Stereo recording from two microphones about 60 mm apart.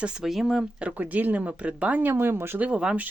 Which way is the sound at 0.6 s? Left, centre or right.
Centre.